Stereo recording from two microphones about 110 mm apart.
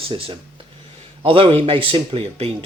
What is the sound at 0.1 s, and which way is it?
Speech, 55° right (ahead or behind).